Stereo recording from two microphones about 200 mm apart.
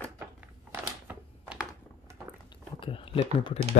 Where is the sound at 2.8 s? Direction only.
25° left (ahead or behind).